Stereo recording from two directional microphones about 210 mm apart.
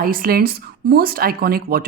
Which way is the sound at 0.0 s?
45° right (ahead or behind).